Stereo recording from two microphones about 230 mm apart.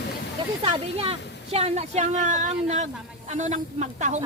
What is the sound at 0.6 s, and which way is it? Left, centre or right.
A woman's voice, right.